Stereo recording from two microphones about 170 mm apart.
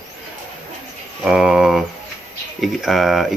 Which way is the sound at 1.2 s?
5° right (ahead or behind).